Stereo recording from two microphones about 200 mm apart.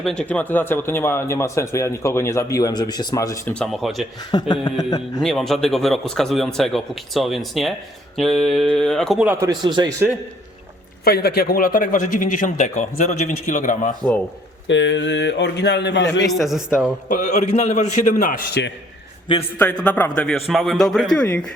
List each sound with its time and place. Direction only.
0.0 s speech: 5° left (ahead or behind)
4.3 s a man's voice: 20° left (ahead or behind)
5.2 s a man's voice: 5° left (ahead or behind); by 9.9 s 20° right (ahead or behind)
11.0 s a man's voice: 50° left (ahead or behind)
14.7 s a man's voice: 65° left (ahead or behind)
16.2 s a man's voice: centre (ahead or behind)
17.1 s a man's voice: 35° left (ahead or behind)
19.8 s a man's voice: 5° left (ahead or behind)